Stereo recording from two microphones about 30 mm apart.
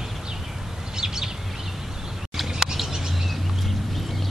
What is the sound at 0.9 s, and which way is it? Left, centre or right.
Bird, centre.